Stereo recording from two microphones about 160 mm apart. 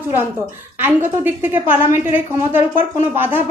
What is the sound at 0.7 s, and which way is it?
A woman's voice, 15° right (ahead or behind).